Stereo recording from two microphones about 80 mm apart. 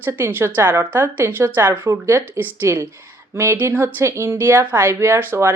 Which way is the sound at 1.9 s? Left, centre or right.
Right.